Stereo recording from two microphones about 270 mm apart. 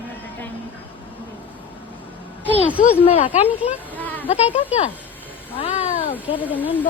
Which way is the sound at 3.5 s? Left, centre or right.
Centre.